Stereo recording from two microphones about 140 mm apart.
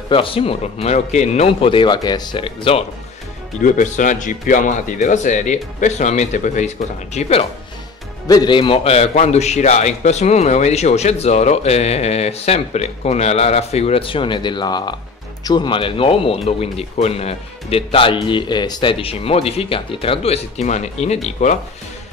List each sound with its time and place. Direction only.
0.1 s a man's voice: 40° left (ahead or behind)
3.5 s speech: 65° left (ahead or behind)
7.2 s a man's voice: 45° left (ahead or behind)
8.3 s a man's voice: 30° left (ahead or behind); by 21.5 s 55° left (ahead or behind)